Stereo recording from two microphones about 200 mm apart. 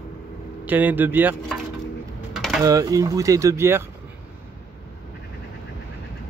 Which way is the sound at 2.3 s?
Centre (ahead or behind).